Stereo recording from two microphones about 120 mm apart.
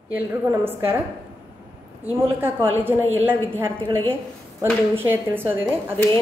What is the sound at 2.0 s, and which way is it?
A woman's voice, 20° right (ahead or behind).